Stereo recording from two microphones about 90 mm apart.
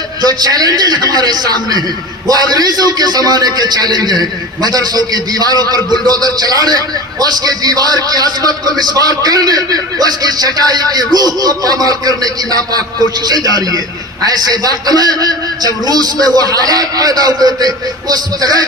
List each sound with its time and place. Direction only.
0.2 s a man's voice: 50° right (ahead or behind)